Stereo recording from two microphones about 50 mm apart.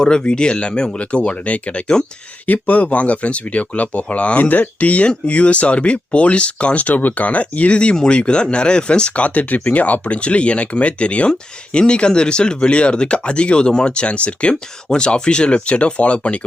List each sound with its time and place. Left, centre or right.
0.0 s speech: centre
2.5 s speech: left
14.5 s speech: centre